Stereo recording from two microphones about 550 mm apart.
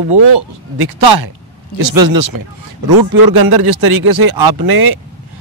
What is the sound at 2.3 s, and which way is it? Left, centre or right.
Speech, right.